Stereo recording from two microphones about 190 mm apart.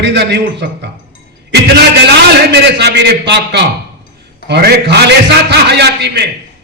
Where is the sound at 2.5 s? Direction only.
60° right (ahead or behind).